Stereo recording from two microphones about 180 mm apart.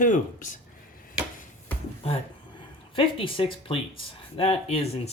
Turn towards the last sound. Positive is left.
turn(degrees=35)  # may be behind; listen again after turning